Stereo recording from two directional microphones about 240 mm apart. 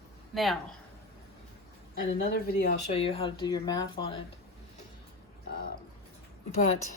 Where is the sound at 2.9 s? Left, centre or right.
Left.